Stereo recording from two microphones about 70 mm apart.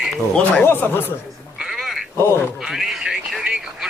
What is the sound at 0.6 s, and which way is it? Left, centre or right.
Speech, left.